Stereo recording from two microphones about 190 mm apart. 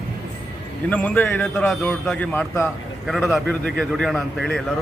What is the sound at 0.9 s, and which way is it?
A man's voice, 10° left (ahead or behind).